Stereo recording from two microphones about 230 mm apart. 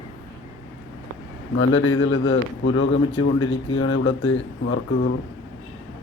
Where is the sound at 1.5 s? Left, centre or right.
Left.